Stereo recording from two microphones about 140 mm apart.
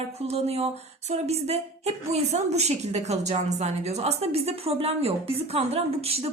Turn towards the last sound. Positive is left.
turn(degrees=-45)  # may be behind; listen again after turning